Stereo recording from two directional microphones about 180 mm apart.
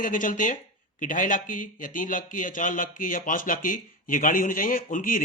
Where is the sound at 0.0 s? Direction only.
50° left (ahead or behind).